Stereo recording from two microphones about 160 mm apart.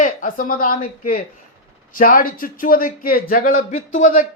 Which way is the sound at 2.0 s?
60° left (ahead or behind).